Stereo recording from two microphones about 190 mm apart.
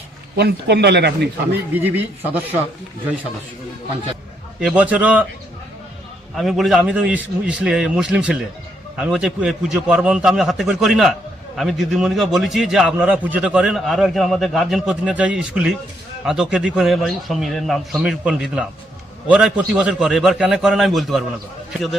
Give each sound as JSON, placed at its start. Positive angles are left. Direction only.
{"t": 0.3, "sound": "speech", "side_deg": -60}
{"t": 1.7, "sound": "speech", "side_deg": -10}
{"t": 4.6, "sound": "speech", "side_deg": -5}
{"t": 6.3, "sound": "a man's voice", "side_deg": 0}